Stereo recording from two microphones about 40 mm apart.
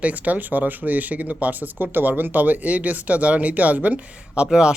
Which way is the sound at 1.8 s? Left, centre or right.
Right.